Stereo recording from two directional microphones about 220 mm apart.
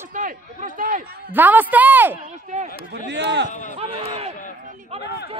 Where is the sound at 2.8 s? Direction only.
50° right (ahead or behind).